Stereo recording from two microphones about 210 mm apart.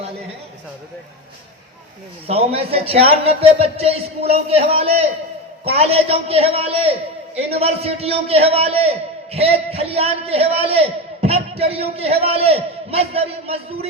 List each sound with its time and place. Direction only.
2.2 s a man's voice: 30° right (ahead or behind)